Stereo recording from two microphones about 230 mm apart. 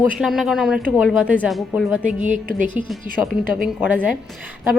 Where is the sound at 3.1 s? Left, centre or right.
Centre.